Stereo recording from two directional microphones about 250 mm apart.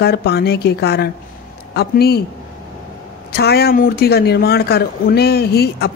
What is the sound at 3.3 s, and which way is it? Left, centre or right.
Speech, left.